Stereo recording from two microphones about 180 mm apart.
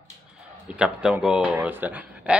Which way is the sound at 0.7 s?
5° right (ahead or behind).